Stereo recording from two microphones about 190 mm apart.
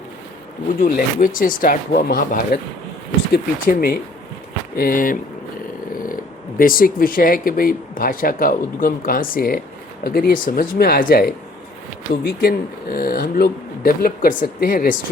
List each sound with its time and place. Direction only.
0.8 s speech: 45° left (ahead or behind)
6.6 s speech: 50° left (ahead or behind)